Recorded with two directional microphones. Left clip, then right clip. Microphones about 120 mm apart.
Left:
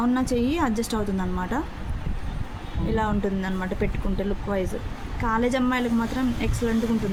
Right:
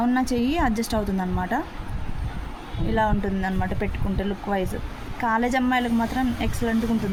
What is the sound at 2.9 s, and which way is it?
A woman's voice, 45° right (ahead or behind).